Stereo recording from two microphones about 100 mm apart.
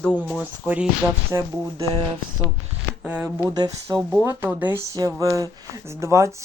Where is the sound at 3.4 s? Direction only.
40° right (ahead or behind).